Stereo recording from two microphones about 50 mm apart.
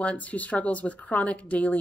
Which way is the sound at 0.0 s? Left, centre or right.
Left.